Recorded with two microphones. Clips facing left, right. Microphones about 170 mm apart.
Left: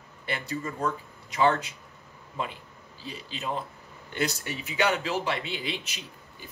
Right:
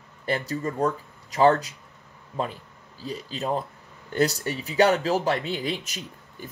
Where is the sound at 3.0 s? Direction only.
40° right (ahead or behind).